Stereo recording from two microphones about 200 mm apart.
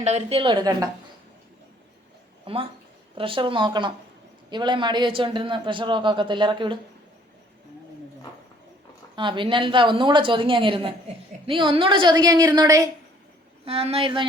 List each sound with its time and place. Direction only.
0.0 s a man's voice: 35° right (ahead or behind)
2.5 s a man's voice: 25° right (ahead or behind)
9.1 s a man's voice: 25° right (ahead or behind)
13.7 s a man's voice: 30° right (ahead or behind)